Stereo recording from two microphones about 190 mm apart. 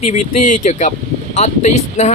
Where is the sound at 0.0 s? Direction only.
40° left (ahead or behind).